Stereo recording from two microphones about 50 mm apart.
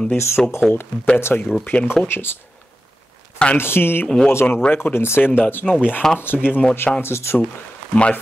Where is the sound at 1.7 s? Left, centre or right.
Centre.